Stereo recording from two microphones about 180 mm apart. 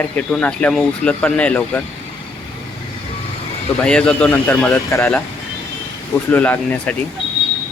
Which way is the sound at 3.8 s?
5° left (ahead or behind).